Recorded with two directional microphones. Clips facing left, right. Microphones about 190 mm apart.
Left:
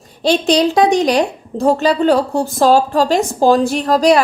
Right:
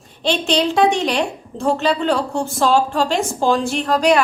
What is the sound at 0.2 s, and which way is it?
A woman's voice, 40° left (ahead or behind).